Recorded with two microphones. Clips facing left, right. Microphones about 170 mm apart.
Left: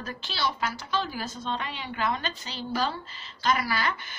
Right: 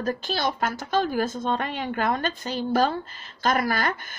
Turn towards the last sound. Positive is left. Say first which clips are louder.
# right 4 dB
turn(degrees=-50)  # may be behind; listen again after turning